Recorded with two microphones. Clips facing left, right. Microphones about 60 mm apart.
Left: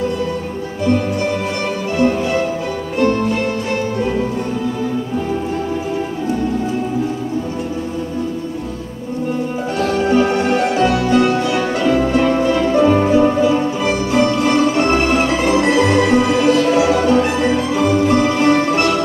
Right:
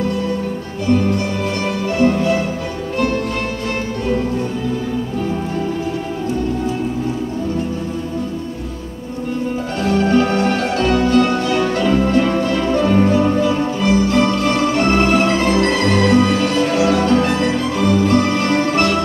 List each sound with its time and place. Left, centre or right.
2.0 s music: centre
10.0 s music: centre